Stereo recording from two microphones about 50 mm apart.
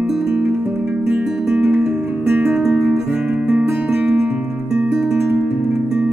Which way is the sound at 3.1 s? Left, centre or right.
Right.